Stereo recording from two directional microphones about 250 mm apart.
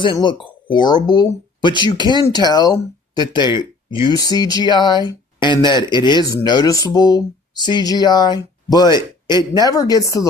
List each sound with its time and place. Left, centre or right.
0.0 s speech: centre